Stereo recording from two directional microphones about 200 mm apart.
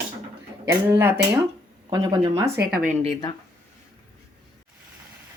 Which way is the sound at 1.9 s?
20° right (ahead or behind).